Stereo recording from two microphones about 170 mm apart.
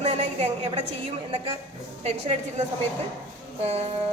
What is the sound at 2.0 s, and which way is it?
Speech, 40° right (ahead or behind).